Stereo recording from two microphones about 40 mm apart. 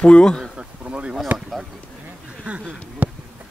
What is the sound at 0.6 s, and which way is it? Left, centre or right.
Bee, right.